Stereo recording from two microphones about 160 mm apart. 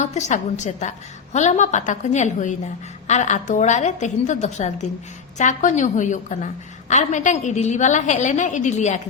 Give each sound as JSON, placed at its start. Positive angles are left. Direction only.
{"t": 0.0, "sound": "a woman's voice", "side_deg": 50}